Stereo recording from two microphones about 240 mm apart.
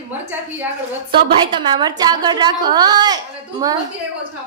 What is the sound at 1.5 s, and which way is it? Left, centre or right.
A woman's voice, centre.